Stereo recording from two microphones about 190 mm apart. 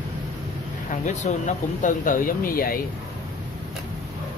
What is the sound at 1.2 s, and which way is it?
Speech, 35° left (ahead or behind).